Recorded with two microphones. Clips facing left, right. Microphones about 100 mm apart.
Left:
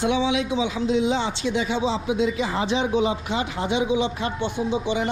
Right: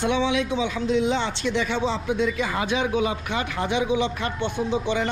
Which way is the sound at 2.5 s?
30° left (ahead or behind).